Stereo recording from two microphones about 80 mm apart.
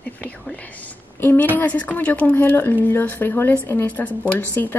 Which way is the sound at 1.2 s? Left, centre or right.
Left.